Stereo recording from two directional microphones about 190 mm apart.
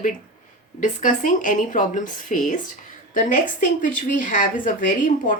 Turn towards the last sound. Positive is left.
turn(degrees=45)  # may be behind; listen again after turning